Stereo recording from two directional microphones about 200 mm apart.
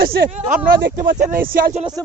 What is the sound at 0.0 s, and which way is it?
Speech, 50° right (ahead or behind).